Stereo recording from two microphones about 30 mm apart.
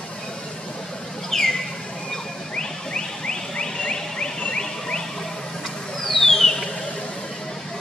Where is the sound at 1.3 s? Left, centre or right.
Centre.